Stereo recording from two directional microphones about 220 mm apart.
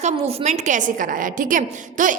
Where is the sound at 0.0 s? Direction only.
30° right (ahead or behind).